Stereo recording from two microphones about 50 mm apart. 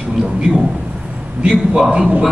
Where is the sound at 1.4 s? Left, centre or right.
Centre.